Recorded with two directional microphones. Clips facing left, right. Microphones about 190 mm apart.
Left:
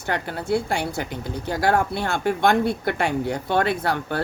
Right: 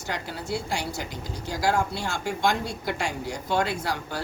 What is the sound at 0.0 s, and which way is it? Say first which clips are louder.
Speech: left 6 dB; 60° left (ahead or behind).